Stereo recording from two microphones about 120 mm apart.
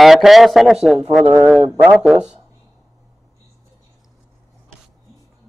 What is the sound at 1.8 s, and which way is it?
Speech, 5° right (ahead or behind).